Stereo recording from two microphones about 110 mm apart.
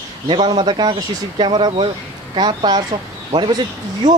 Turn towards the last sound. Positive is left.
turn(degrees=-35)  # may be behind; listen again after turning